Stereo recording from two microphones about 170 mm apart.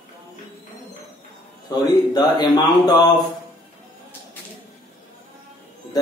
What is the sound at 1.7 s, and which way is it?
Speech, 25° left (ahead or behind).